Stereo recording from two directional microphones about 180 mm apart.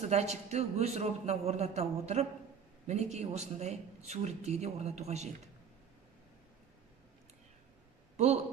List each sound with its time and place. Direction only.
0.0 s speech: 35° right (ahead or behind)